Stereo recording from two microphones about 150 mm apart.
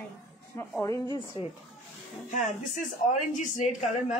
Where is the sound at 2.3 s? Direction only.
55° left (ahead or behind).